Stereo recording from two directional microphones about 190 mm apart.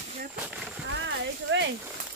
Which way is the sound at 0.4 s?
5° right (ahead or behind).